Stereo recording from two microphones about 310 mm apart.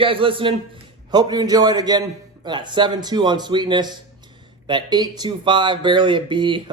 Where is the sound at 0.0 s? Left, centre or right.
Centre.